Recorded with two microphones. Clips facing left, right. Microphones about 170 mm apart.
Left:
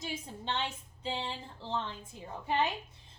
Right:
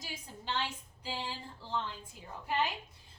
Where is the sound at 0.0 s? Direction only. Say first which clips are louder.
Left 5 dB; 25° left (ahead or behind).